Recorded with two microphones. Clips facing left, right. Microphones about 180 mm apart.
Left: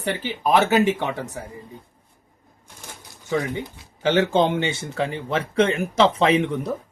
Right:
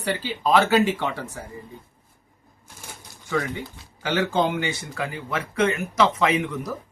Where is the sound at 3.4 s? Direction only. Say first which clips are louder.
Right 1 dB; 20° left (ahead or behind).